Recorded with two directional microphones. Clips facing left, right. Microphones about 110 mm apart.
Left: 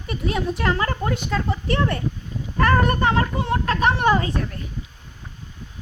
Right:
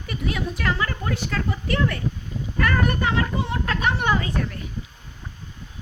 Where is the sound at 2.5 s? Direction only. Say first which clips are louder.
Left 4 dB; 40° left (ahead or behind).